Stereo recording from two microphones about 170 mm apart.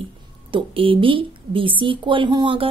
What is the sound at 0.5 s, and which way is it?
A woman's voice, 30° right (ahead or behind).